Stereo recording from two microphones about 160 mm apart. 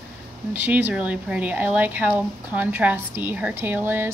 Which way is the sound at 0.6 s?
10° right (ahead or behind).